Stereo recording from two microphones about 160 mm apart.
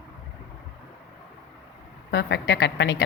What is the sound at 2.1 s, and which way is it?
Speech, 90° left.